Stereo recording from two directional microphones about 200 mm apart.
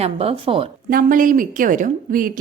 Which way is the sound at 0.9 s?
45° right (ahead or behind).